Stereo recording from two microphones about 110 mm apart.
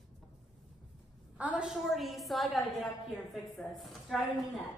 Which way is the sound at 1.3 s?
10° right (ahead or behind).